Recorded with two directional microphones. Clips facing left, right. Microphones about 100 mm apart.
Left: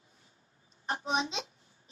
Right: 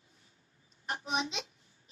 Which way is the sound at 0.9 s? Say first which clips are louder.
Left 3 dB; 30° left (ahead or behind).